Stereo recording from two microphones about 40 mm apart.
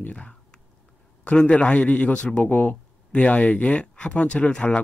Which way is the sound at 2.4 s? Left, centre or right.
Left.